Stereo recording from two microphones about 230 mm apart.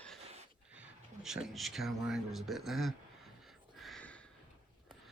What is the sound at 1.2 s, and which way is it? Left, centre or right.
Speech, centre.